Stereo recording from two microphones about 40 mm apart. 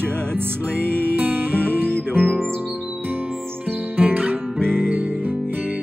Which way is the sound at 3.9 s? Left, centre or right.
Right.